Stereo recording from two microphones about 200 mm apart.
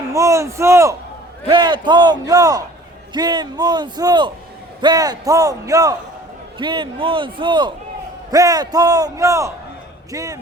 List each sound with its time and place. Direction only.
0.1 s a man's voice: 15° right (ahead or behind)